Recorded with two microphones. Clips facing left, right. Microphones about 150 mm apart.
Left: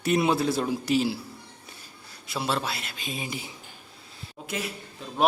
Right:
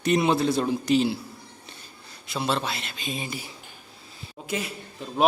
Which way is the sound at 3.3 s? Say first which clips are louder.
Even; 20° left (ahead or behind).